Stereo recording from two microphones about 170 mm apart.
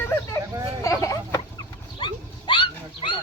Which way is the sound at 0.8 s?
15° left (ahead or behind).